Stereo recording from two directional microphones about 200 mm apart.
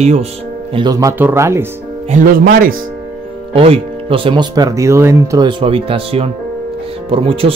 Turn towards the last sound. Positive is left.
turn(degrees=-25)  # may be behind; listen again after turning